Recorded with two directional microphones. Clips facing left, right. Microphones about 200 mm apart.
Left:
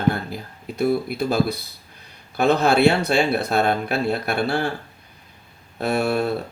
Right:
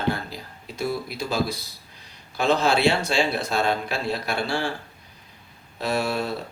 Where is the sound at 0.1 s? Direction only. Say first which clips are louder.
Left 1 dB; 55° left (ahead or behind).